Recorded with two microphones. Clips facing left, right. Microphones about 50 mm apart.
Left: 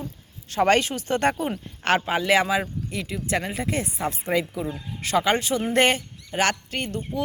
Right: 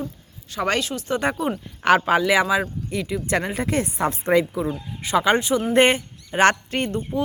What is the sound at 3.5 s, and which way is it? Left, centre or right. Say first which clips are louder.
Speech: right 4 dB; right.